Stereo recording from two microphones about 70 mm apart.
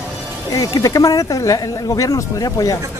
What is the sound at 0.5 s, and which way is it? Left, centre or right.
Speech, left.